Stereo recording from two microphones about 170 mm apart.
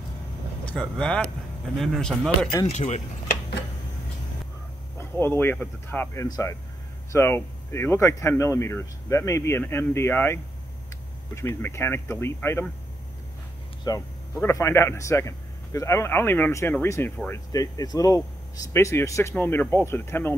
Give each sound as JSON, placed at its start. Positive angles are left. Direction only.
{"t": 0.7, "sound": "speech", "side_deg": 5}
{"t": 2.6, "sound": "speech", "side_deg": 40}
{"t": 4.9, "sound": "speech", "side_deg": 15}
{"t": 13.8, "sound": "speech", "side_deg": 20}